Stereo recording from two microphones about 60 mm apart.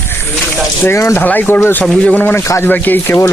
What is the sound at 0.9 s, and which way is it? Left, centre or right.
Speech, left.